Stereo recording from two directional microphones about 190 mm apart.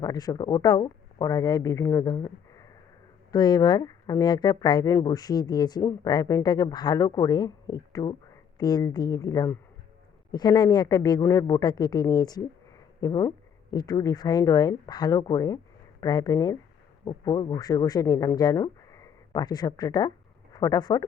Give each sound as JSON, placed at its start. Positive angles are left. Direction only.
{"t": 0.0, "sound": "speech", "side_deg": 20}